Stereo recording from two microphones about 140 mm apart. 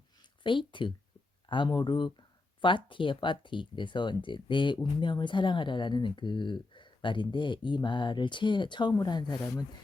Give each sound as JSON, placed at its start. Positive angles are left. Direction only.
{"t": 0.4, "sound": "speech", "side_deg": 35}